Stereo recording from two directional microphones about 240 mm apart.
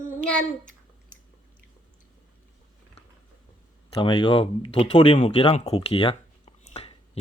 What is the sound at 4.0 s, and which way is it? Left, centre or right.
Speech, left.